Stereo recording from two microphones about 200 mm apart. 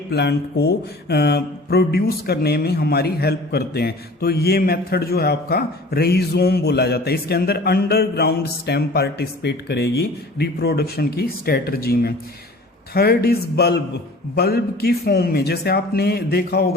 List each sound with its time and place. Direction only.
0.1 s speech: 55° left (ahead or behind)